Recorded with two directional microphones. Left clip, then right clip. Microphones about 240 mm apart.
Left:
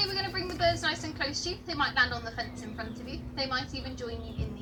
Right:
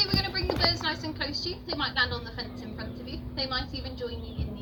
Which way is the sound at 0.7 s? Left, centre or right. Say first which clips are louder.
Even; centre.